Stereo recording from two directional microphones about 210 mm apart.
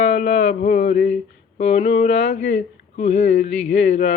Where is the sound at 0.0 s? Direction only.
35° left (ahead or behind).